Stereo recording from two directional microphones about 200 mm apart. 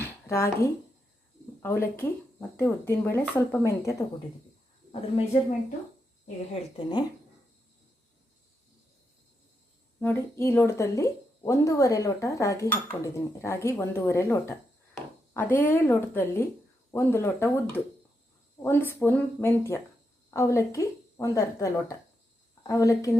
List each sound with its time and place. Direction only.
0.0 s a sound: 15° left (ahead or behind)
1.6 s speech: 10° left (ahead or behind)
4.9 s speech: 30° left (ahead or behind)
10.0 s speech: 10° left (ahead or behind)